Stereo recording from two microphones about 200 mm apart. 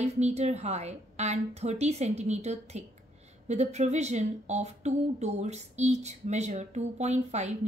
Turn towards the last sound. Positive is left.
turn(degrees=-35)  # may be behind; listen again after turning